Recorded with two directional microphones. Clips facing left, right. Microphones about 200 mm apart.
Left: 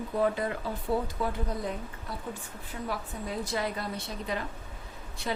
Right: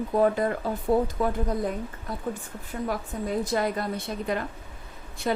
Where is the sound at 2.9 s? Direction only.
50° right (ahead or behind).